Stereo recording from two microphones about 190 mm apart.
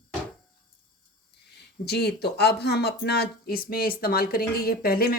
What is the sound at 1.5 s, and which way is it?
Speech, 60° left (ahead or behind).